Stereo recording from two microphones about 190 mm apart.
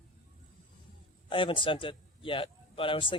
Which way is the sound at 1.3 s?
25° left (ahead or behind).